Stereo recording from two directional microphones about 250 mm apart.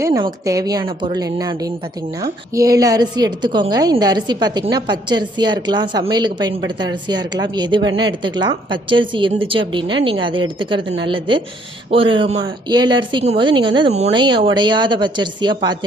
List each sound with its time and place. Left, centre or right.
0.0 s a woman's voice: centre